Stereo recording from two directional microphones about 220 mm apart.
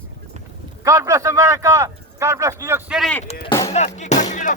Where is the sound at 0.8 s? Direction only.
15° right (ahead or behind).